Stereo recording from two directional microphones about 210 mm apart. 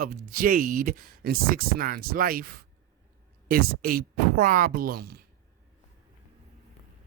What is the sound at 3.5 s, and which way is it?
Speech, 45° right (ahead or behind).